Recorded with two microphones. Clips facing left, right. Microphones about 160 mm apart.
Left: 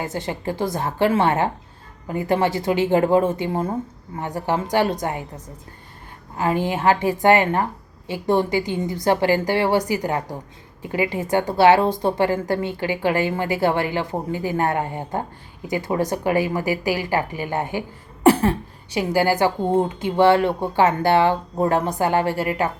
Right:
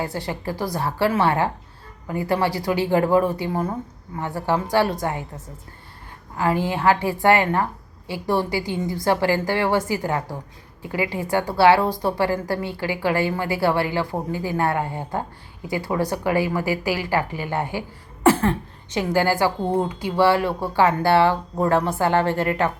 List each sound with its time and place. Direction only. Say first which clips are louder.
0.0 s a woman's voice: left 1 dB; 20° left (ahead or behind)
6.3 s a woman's voice: even; 20° left (ahead or behind)